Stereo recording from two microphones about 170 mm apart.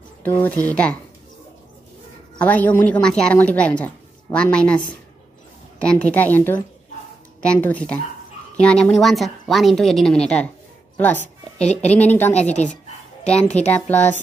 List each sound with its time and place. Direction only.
0.2 s speech: 10° left (ahead or behind)
2.3 s a man's voice: 10° left (ahead or behind)
12.4 s a woman's voice: 40° left (ahead or behind)
13.7 s speech: 10° left (ahead or behind)